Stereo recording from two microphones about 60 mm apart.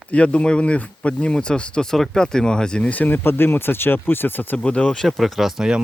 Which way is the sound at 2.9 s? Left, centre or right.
Left.